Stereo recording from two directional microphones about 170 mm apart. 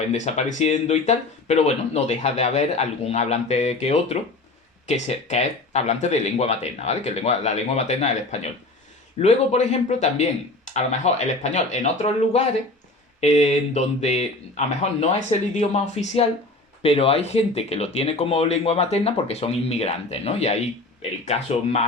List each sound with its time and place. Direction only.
0.1 s speech: 40° left (ahead or behind)